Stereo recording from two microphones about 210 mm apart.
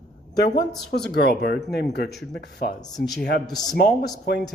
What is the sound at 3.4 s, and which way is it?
Speech, 20° left (ahead or behind).